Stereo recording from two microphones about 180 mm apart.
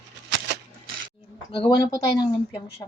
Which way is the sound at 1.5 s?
25° left (ahead or behind).